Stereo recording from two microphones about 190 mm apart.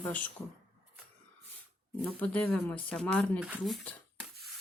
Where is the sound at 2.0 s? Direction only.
5° left (ahead or behind).